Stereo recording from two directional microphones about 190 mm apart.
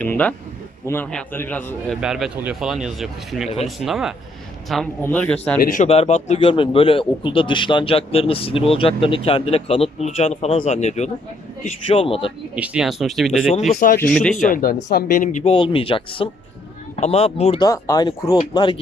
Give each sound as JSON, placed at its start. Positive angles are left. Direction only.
{"t": 0.0, "sound": "a man's voice", "side_deg": 5}
{"t": 2.0, "sound": "a man's voice", "side_deg": -5}
{"t": 5.5, "sound": "speech", "side_deg": 45}
{"t": 5.9, "sound": "a man's voice", "side_deg": 35}
{"t": 12.5, "sound": "speech", "side_deg": -5}
{"t": 13.7, "sound": "speech", "side_deg": 45}
{"t": 15.5, "sound": "a man's voice", "side_deg": 25}
{"t": 17.6, "sound": "a man's voice", "side_deg": 20}